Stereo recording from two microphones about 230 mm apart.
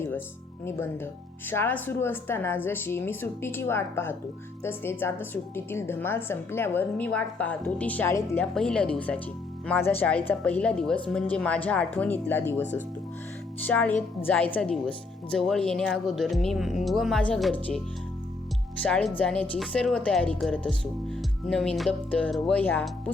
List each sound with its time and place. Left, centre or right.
1.5 s a woman's voice: centre
13.7 s a woman's voice: centre
18.8 s a woman's voice: centre